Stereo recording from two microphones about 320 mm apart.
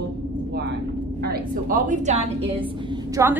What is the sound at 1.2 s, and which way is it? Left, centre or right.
A woman's voice, right.